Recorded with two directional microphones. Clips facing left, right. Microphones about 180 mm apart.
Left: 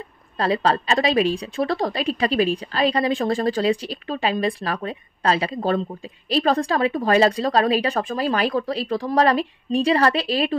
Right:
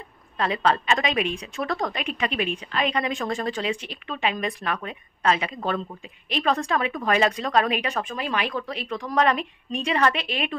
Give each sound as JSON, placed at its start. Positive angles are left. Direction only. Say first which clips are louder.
{"t": 0.4, "sound": "a woman's voice", "louder": "left 3 dB", "side_deg": 35}